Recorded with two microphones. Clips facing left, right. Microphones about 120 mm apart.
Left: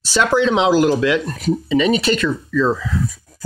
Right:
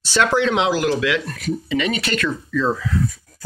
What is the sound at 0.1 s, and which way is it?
Speech, 15° left (ahead or behind).